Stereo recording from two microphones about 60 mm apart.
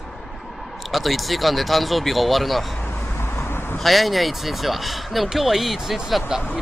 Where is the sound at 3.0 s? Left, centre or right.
Left.